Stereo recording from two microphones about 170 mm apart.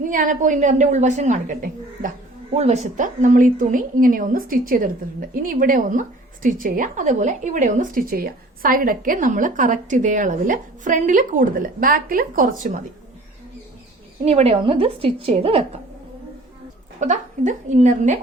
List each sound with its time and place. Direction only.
0.1 s a woman's voice: 50° right (ahead or behind)
14.3 s a woman's voice: 40° right (ahead or behind)
17.0 s a woman's voice: 45° right (ahead or behind)